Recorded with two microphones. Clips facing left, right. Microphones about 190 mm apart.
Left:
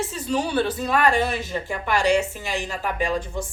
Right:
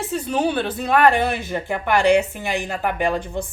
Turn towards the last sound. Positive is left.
turn(degrees=-60)  # may be behind; listen again after turning